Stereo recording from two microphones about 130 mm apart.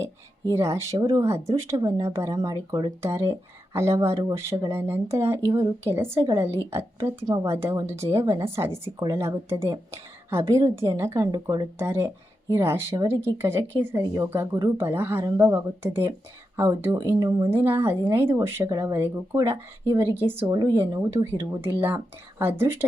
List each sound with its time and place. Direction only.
0.5 s a woman's voice: 20° right (ahead or behind)